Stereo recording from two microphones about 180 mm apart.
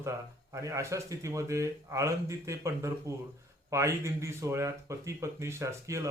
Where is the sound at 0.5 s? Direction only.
15° right (ahead or behind).